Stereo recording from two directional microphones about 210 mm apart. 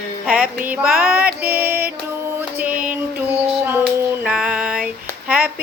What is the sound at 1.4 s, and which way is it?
Music, 10° right (ahead or behind).